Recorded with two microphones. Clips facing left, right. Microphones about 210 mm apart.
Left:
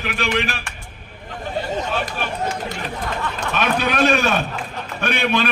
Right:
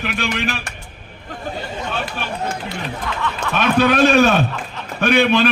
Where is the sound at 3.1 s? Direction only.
45° left (ahead or behind).